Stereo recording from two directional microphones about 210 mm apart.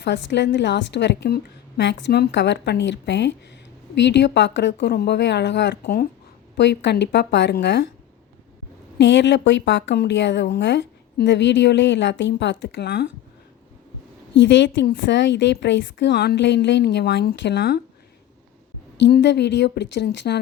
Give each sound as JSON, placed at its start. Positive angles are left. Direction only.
{"t": 0.0, "sound": "a woman's voice", "side_deg": 55}
{"t": 9.0, "sound": "a woman's voice", "side_deg": 60}
{"t": 14.3, "sound": "a woman's voice", "side_deg": 60}
{"t": 18.9, "sound": "a woman's voice", "side_deg": 55}